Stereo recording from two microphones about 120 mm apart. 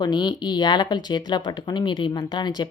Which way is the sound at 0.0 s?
35° left (ahead or behind).